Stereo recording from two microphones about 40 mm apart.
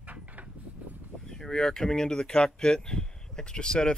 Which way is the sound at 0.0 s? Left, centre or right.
Right.